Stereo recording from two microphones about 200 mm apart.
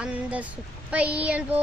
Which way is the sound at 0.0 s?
5° right (ahead or behind).